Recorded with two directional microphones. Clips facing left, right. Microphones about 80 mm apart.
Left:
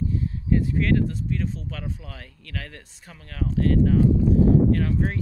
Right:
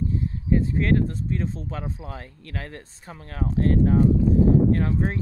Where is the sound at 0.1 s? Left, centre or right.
Right.